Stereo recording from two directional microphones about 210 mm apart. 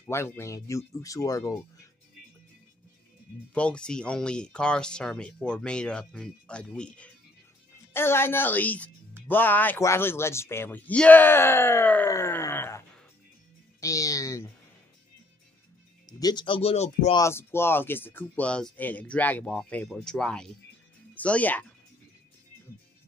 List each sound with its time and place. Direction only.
0.0 s speech: 10° left (ahead or behind)
3.5 s speech: 5° left (ahead or behind)
16.1 s speech: 20° left (ahead or behind)
17.2 s speech: 10° left (ahead or behind)